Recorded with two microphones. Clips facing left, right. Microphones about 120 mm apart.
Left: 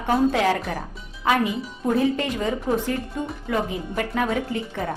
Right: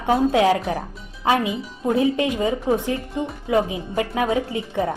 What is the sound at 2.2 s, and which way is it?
A woman's voice, 15° right (ahead or behind).